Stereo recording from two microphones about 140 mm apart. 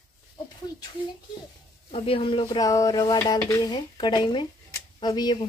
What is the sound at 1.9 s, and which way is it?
Speech, 45° left (ahead or behind).